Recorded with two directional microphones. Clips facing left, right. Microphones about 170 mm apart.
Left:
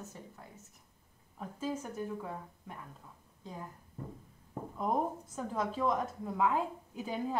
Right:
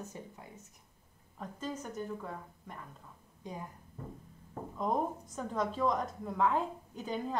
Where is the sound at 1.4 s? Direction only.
10° left (ahead or behind).